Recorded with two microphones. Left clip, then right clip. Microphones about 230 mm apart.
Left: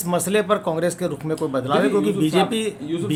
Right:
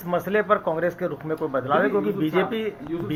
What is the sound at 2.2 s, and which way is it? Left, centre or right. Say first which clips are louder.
Speech: left 4 dB; left.